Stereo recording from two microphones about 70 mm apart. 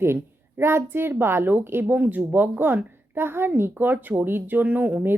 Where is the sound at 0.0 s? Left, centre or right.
Right.